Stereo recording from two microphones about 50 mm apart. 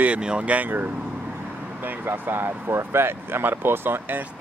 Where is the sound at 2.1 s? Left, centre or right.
Right.